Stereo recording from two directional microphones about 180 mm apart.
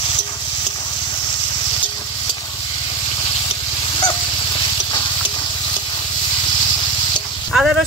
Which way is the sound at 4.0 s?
25° left (ahead or behind).